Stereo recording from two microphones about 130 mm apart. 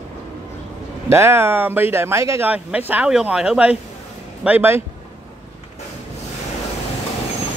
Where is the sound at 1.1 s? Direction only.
20° right (ahead or behind).